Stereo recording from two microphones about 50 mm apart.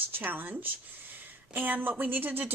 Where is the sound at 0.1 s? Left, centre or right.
Right.